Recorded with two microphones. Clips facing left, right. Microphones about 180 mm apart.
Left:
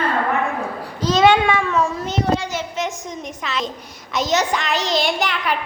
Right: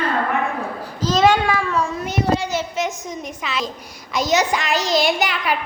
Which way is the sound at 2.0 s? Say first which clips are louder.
Even; 10° right (ahead or behind).